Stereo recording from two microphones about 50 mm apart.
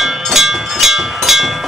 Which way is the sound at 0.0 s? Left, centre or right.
Centre.